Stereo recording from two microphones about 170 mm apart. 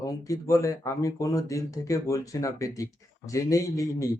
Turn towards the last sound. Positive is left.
turn(degrees=20)  # may be behind; listen again after turning